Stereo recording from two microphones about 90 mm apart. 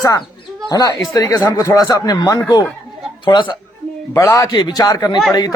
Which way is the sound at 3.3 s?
60° left (ahead or behind).